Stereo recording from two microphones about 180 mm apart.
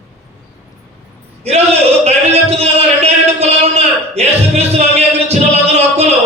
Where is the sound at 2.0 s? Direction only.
35° right (ahead or behind).